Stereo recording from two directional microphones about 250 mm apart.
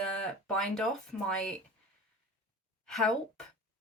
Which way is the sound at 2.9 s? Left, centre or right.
Centre.